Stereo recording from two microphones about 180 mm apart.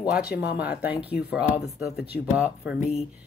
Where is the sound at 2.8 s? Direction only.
35° left (ahead or behind).